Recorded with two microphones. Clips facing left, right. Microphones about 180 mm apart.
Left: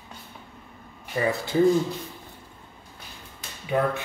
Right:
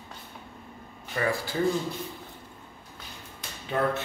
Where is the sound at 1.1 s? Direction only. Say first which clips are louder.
Left 3 dB; 20° left (ahead or behind).